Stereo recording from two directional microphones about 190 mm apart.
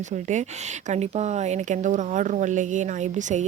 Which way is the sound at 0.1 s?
40° right (ahead or behind).